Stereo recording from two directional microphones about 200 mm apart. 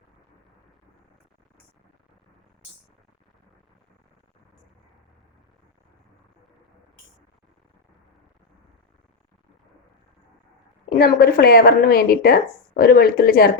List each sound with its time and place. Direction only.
10.8 s speech: 50° left (ahead or behind)